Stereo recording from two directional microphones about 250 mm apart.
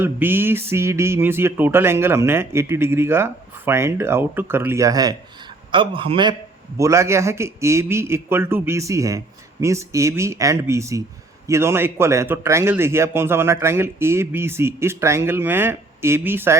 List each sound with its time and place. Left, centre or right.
0.0 s a man's voice: centre